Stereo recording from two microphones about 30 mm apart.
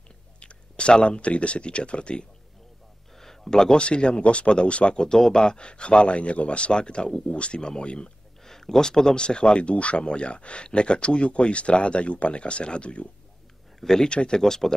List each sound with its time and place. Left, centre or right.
0.4 s a sound: left
0.9 s speech: left
3.2 s a sound: centre
3.7 s speech: left
4.9 s speech: left
8.5 s speech: centre
9.1 s speech: left
13.7 s speech: centre
14.0 s speech: left
14.4 s speech: centre